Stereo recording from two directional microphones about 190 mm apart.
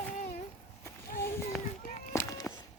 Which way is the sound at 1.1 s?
15° left (ahead or behind).